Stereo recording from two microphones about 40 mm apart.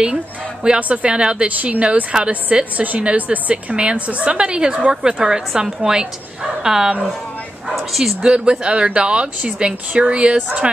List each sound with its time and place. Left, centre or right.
0.7 s speech: right
1.1 s speech: right
1.6 s speech: right
2.1 s a woman's voice: right
7.7 s speech: centre
8.2 s speech: right